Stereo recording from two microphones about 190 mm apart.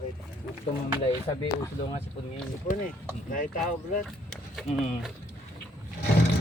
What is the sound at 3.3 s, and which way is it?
Speech, 45° left (ahead or behind).